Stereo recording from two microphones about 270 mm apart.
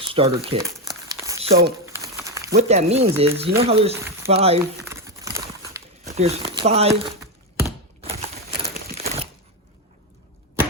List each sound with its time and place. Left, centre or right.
0.0 s crumpling: centre
1.9 s a sound: centre
2.5 s speech: right
4.8 s crumpling: centre
6.1 s speech: right
8.0 s typewriter: right
8.7 s a sound: right